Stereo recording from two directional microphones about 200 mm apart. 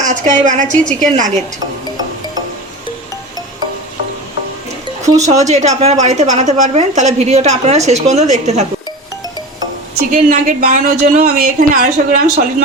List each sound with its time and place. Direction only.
0.0 s a woman's voice: 40° right (ahead or behind)
5.2 s a woman's voice: 35° right (ahead or behind)
10.1 s a woman's voice: 40° right (ahead or behind)